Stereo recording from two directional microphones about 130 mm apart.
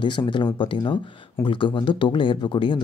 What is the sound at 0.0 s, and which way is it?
Speech, 35° left (ahead or behind).